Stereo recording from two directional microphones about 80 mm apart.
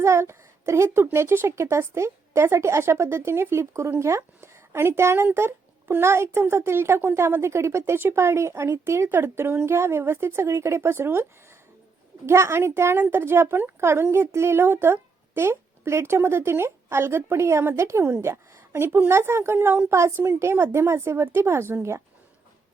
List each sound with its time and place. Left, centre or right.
0.0 s a woman's voice: right